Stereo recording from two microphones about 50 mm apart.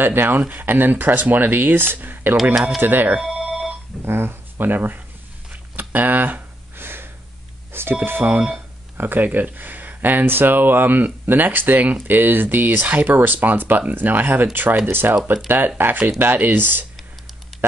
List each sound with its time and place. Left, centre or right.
0.0 s speech: right
3.2 s telephone bell ringing: centre
4.0 s speech: right
5.5 s a sound: right
8.0 s speech: right